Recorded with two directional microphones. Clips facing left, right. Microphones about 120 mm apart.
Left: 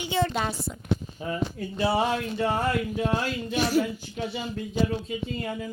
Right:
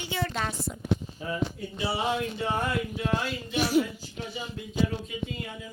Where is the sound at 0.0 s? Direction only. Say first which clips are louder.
Left 6 dB; 25° left (ahead or behind).